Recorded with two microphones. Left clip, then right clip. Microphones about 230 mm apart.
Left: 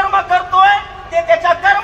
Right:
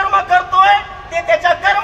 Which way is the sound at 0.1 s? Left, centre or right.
Right.